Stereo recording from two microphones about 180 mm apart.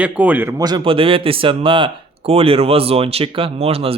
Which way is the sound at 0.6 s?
25° right (ahead or behind).